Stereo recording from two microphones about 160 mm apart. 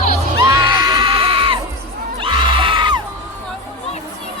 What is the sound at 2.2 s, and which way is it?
Crowd, 30° right (ahead or behind).